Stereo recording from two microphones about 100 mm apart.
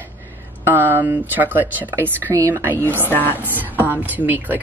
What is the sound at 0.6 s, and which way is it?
A woman's voice, 20° right (ahead or behind).